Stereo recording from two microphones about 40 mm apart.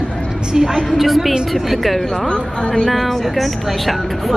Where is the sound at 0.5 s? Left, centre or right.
Centre.